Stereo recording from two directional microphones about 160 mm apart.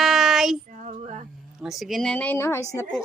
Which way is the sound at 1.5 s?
Centre (ahead or behind).